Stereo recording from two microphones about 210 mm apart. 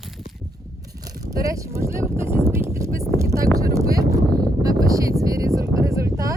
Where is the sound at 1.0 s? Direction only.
15° right (ahead or behind).